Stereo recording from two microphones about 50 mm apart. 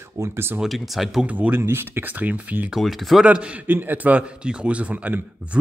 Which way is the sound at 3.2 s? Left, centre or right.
Right.